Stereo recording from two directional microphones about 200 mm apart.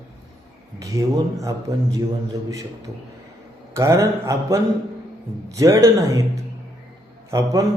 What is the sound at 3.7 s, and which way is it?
A man's voice, 15° right (ahead or behind).